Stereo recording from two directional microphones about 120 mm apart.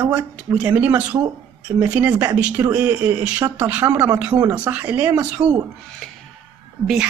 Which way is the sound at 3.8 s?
25° right (ahead or behind).